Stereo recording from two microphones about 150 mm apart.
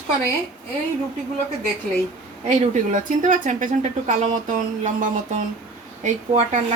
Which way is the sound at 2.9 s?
55° right (ahead or behind).